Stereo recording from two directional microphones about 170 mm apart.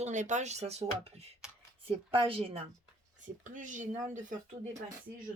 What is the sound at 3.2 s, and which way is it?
Speech, 50° right (ahead or behind).